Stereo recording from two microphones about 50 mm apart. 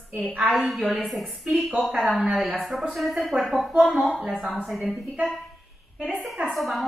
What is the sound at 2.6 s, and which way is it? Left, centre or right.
Speech, centre.